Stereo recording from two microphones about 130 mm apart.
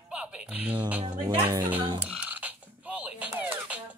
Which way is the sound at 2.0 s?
15° right (ahead or behind).